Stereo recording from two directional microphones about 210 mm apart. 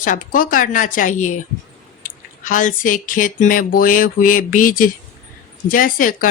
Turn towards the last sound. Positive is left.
turn(degrees=40)  # may be behind; listen again after turning